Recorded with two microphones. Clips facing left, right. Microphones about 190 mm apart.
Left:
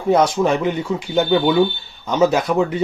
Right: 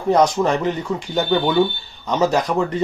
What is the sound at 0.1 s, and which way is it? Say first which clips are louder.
Speech: left 1 dB; 5° left (ahead or behind).